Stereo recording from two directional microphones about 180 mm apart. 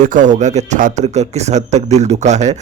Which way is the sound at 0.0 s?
45° right (ahead or behind).